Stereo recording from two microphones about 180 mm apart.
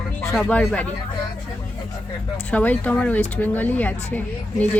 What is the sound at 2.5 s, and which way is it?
Speech, 10° left (ahead or behind).